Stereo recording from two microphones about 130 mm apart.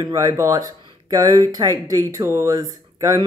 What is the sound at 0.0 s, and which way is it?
Speech, 30° right (ahead or behind).